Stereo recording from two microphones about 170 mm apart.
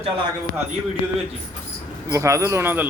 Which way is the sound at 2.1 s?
15° right (ahead or behind).